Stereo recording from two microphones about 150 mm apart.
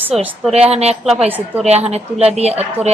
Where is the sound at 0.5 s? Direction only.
45° right (ahead or behind).